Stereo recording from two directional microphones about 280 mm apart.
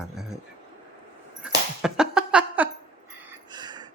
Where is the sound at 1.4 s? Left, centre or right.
Centre.